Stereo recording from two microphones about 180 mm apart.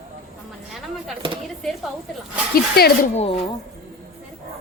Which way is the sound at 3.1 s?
35° left (ahead or behind).